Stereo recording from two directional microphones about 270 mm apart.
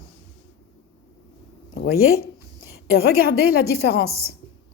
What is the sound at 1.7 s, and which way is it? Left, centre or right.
Speech, left.